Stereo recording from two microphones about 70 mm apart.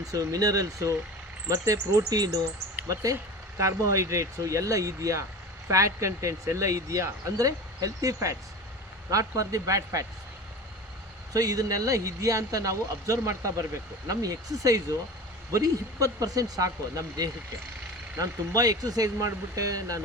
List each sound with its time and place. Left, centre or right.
0.1 s speech: right
2.9 s speech: right
11.3 s speech: right
14.1 s speech: right